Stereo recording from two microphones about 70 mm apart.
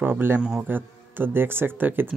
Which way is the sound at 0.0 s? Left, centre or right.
Right.